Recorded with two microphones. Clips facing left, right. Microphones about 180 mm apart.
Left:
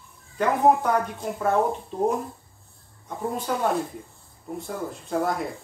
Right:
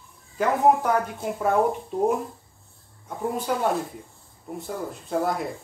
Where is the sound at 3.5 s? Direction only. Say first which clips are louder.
Right 1 dB; 5° right (ahead or behind).